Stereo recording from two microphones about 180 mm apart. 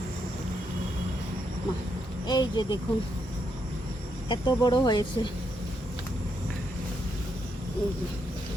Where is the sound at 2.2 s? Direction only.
25° left (ahead or behind).